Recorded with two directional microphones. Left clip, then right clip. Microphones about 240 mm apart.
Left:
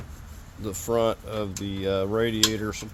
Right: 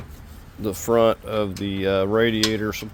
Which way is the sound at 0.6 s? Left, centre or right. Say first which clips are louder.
Right 6 dB; right.